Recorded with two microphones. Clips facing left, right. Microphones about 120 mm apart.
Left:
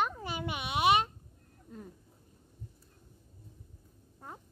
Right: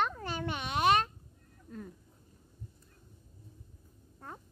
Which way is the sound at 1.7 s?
20° left (ahead or behind).